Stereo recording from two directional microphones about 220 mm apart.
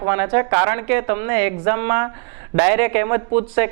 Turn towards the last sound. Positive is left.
turn(degrees=-10)  # may be behind; listen again after turning